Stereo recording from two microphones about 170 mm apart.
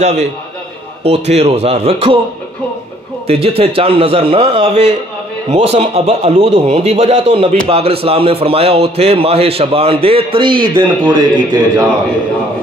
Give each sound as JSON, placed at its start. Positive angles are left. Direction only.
{"t": 0.0, "sound": "speech", "side_deg": -40}
{"t": 3.3, "sound": "speech", "side_deg": -35}